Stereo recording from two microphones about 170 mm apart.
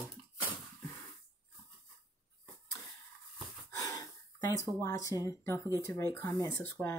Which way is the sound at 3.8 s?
20° left (ahead or behind).